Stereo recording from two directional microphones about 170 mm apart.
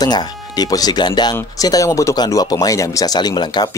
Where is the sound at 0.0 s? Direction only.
25° left (ahead or behind).